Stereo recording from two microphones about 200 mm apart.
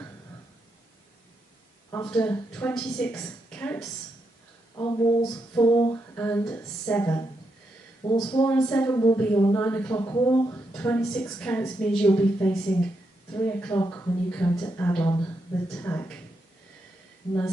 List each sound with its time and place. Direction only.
2.0 s speech: 5° left (ahead or behind)
4.7 s speech: 20° left (ahead or behind)
8.0 s speech: 20° left (ahead or behind)